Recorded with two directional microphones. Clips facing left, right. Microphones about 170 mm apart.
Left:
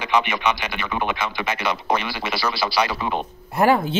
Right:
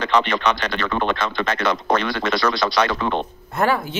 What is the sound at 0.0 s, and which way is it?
Speech, 10° left (ahead or behind).